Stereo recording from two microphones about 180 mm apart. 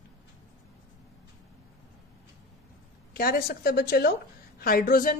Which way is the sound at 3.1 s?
60° left (ahead or behind).